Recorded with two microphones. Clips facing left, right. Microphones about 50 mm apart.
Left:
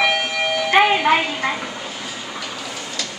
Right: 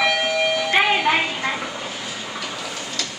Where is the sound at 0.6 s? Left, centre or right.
Centre.